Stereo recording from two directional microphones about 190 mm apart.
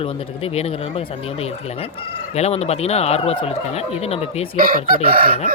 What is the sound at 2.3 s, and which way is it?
Speech, 35° left (ahead or behind).